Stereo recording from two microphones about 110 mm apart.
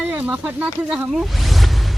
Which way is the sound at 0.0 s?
15° right (ahead or behind).